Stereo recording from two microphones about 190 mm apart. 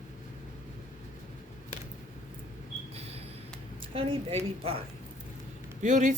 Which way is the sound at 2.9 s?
35° right (ahead or behind).